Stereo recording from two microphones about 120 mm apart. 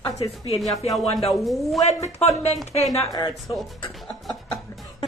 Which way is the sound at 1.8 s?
65° left (ahead or behind).